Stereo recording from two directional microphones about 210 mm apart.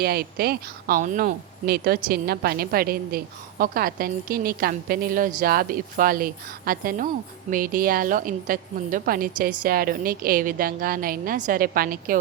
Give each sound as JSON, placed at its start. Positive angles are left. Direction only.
{"t": 0.0, "sound": "a woman's voice", "side_deg": -45}